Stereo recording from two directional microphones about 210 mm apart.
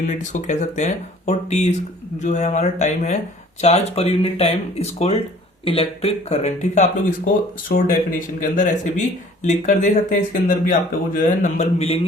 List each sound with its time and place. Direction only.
0.1 s speech: 35° left (ahead or behind)
7.7 s speech: 45° left (ahead or behind)
8.4 s speech: 35° left (ahead or behind)